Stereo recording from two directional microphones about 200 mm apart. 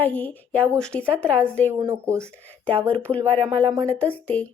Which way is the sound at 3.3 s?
25° right (ahead or behind).